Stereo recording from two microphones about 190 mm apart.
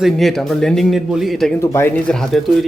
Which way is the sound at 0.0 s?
Centre (ahead or behind).